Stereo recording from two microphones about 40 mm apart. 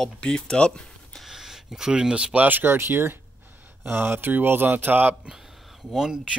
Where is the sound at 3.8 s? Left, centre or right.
Right.